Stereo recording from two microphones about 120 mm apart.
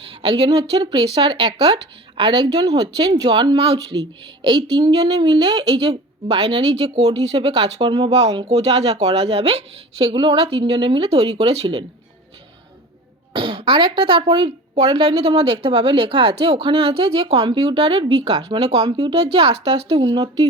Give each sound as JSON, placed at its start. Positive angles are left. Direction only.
{"t": 0.2, "sound": "a woman's voice", "side_deg": -50}
{"t": 10.1, "sound": "a woman's voice", "side_deg": -45}
{"t": 11.4, "sound": "speech", "side_deg": -60}
{"t": 13.3, "sound": "speech", "side_deg": -45}
{"t": 15.7, "sound": "a woman's voice", "side_deg": -55}